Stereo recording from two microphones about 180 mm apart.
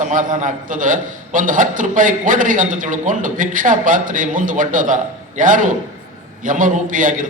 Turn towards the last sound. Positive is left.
turn(degrees=-45)  # may be behind; listen again after turning